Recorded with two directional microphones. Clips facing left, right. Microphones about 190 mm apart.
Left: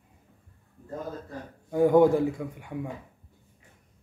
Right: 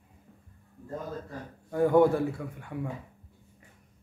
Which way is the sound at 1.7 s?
15° left (ahead or behind).